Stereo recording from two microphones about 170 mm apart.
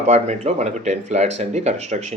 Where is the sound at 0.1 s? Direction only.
40° right (ahead or behind).